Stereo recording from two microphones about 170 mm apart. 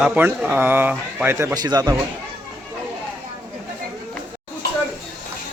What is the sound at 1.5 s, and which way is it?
Speech, 20° right (ahead or behind).